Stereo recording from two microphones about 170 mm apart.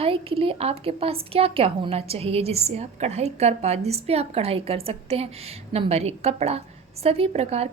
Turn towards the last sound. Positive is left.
turn(degrees=-40)  # may be behind; listen again after turning